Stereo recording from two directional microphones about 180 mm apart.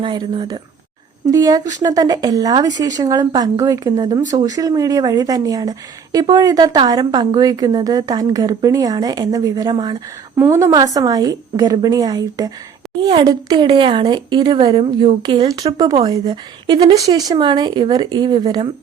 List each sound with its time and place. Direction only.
0.0 s speech: 25° right (ahead or behind)